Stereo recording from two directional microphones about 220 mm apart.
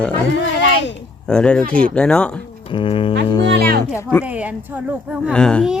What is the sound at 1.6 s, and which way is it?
Speech, 40° right (ahead or behind).